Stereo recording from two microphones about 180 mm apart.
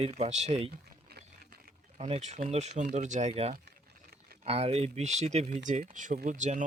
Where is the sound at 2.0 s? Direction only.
35° right (ahead or behind).